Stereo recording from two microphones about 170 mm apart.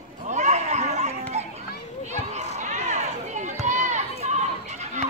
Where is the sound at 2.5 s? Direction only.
45° right (ahead or behind).